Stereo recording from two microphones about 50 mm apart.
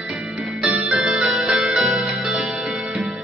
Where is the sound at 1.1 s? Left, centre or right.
Centre.